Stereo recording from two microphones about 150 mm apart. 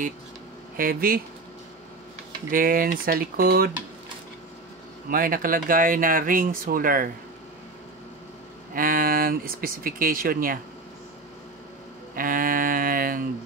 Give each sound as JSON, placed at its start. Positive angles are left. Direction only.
{"t": 0.7, "sound": "speech", "side_deg": -75}
{"t": 2.5, "sound": "speech", "side_deg": -70}
{"t": 5.1, "sound": "speech", "side_deg": -70}
{"t": 8.7, "sound": "speech", "side_deg": -70}
{"t": 12.2, "sound": "speech", "side_deg": -70}